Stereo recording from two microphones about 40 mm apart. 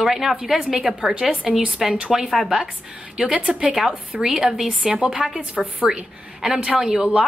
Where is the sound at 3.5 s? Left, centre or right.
Right.